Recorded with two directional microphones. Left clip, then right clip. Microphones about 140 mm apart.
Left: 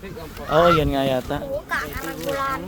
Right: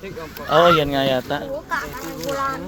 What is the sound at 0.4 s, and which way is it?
Speech, 20° left (ahead or behind).